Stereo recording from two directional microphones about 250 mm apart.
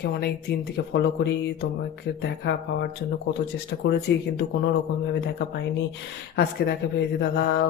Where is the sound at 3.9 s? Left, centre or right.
Left.